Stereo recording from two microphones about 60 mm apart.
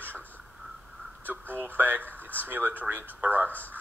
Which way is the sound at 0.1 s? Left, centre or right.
Left.